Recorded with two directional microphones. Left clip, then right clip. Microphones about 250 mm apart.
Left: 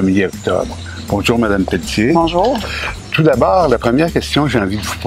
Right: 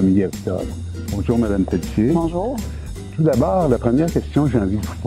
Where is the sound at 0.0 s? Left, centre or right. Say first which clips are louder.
Left 4 dB; centre.